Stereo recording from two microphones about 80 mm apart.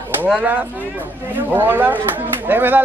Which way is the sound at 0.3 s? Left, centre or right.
Centre.